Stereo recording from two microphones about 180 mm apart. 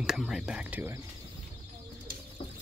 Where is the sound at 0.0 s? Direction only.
Centre (ahead or behind).